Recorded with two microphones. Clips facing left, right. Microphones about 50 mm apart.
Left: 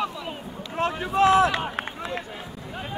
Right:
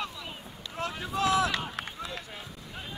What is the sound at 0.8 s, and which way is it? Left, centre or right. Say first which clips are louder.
Boat: left 8 dB; left.